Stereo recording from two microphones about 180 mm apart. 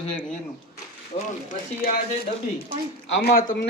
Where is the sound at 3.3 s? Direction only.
55° left (ahead or behind).